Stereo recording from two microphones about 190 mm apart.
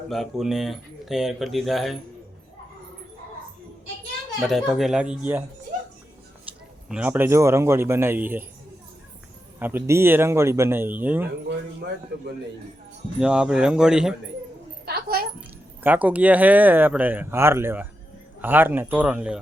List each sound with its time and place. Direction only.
0.1 s speech: centre (ahead or behind)
4.4 s speech: centre (ahead or behind)
6.8 s speech: 5° right (ahead or behind)
9.6 s speech: 10° right (ahead or behind)
12.1 s a man's voice: 55° right (ahead or behind)
13.1 s speech: 5° right (ahead or behind)
15.4 s speech: 10° right (ahead or behind)